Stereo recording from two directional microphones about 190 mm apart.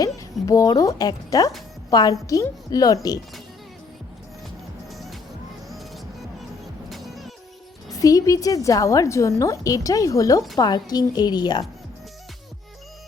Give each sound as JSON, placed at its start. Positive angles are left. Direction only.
{"t": 0.0, "sound": "a woman's voice", "side_deg": 15}
{"t": 4.9, "sound": "music", "side_deg": 0}
{"t": 6.9, "sound": "music", "side_deg": 0}
{"t": 7.9, "sound": "a woman's voice", "side_deg": 20}